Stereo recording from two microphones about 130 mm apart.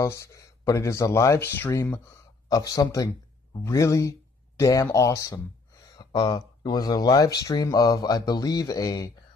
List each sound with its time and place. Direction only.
0.0 s speech: 25° left (ahead or behind)